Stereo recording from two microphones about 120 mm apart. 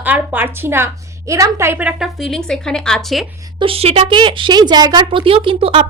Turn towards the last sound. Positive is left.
turn(degrees=-45)  # may be behind; listen again after turning